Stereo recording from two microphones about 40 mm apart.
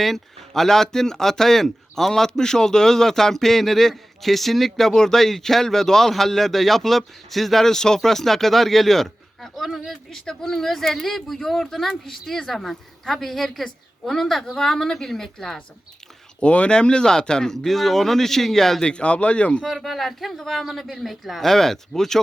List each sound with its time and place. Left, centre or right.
0.0 s speech: centre
10.1 s speech: centre
16.4 s speech: left; by 18.9 s centre
18.9 s speech: left
19.8 s speech: centre